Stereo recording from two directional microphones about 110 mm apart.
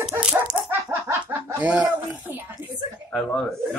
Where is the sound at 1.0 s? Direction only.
25° right (ahead or behind).